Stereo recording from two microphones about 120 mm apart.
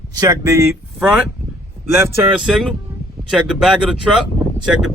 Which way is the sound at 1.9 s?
20° right (ahead or behind).